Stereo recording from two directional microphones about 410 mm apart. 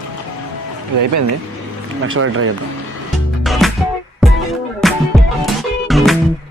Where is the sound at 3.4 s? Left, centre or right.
Centre.